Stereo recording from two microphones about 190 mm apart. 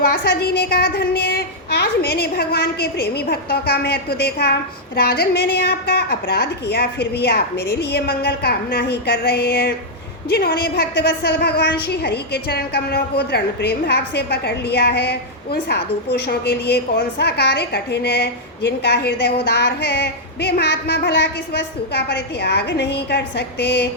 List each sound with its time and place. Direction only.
0.0 s a woman's voice: 55° left (ahead or behind)